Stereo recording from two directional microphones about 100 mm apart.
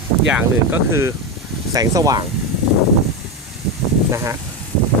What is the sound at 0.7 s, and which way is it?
Speech, 30° right (ahead or behind).